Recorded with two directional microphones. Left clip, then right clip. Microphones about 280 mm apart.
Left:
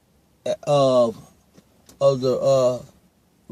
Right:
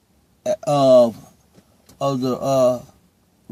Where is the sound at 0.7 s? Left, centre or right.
Right.